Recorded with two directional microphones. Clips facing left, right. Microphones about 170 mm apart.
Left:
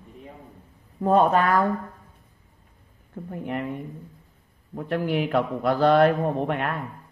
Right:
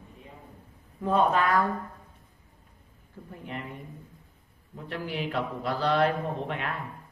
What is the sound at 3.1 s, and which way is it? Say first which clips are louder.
Speech: left 9 dB; 55° left (ahead or behind).